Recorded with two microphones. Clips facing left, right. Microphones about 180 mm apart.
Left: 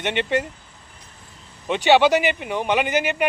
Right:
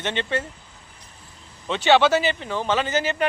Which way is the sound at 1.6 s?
15° left (ahead or behind).